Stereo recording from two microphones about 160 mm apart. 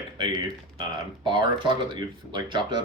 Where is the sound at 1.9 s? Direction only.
30° right (ahead or behind).